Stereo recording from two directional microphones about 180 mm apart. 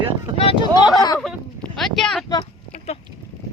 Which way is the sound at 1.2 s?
5° left (ahead or behind).